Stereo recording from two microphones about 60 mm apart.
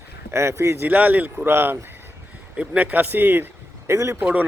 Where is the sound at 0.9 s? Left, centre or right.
Right.